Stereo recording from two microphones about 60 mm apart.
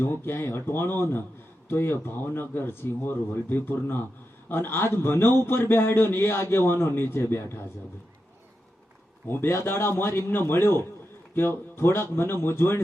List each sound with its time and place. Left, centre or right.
0.0 s a man's voice: left
9.2 s a man's voice: left